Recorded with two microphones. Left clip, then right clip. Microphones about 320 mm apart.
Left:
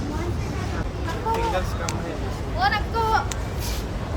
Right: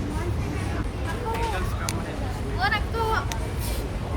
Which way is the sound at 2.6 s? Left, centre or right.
Left.